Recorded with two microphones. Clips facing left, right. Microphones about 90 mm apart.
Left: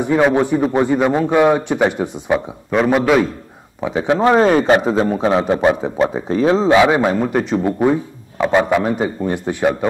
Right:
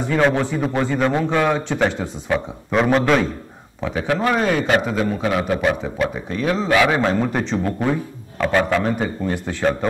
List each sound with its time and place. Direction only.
0.0 s a man's voice: 15° left (ahead or behind)
2.7 s a man's voice: centre (ahead or behind)
3.8 s a man's voice: 20° left (ahead or behind)
4.4 s a man's voice: 35° left (ahead or behind); by 9.8 s 15° left (ahead or behind)